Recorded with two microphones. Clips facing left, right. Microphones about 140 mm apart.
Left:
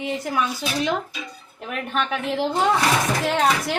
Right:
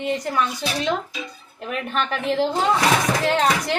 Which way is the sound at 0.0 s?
5° left (ahead or behind).